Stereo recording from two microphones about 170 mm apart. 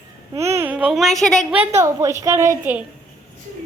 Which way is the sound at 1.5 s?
15° right (ahead or behind).